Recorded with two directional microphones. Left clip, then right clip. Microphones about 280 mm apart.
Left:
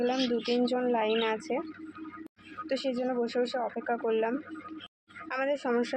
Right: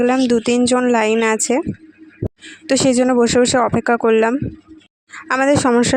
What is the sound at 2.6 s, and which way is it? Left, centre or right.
Speech, right.